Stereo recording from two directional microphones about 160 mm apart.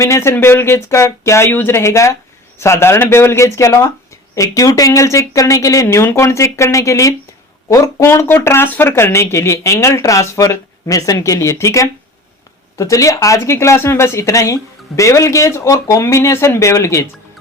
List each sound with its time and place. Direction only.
0.0 s speech: 15° left (ahead or behind)